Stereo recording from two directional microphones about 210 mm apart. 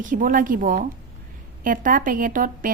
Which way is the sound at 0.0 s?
40° right (ahead or behind).